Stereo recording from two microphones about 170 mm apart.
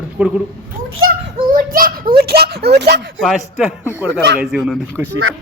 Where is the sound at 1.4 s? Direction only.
55° right (ahead or behind); by 3.1 s 85° right.